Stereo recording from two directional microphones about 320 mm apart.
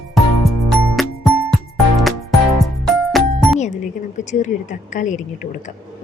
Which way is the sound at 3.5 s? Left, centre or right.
Left.